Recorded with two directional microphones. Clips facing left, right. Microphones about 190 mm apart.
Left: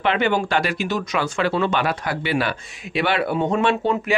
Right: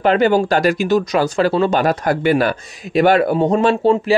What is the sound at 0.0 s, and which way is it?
Speech, 40° right (ahead or behind).